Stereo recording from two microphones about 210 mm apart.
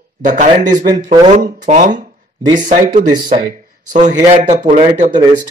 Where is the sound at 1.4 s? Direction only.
35° right (ahead or behind).